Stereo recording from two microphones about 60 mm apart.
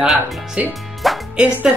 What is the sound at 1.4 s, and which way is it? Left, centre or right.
Speech, centre.